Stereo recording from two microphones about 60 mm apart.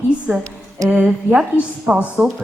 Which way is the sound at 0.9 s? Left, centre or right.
Centre.